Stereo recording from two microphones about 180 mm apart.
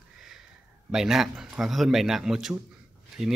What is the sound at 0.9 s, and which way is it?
A man's voice, centre (ahead or behind).